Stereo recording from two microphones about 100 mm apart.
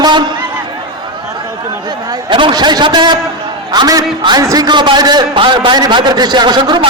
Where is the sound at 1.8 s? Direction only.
50° right (ahead or behind).